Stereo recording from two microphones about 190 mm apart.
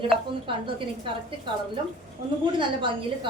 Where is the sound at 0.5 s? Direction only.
25° right (ahead or behind).